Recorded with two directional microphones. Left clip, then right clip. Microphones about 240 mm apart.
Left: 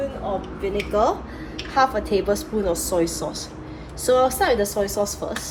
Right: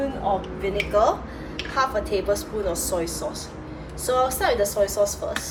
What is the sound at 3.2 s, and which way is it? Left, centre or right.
Speech, left.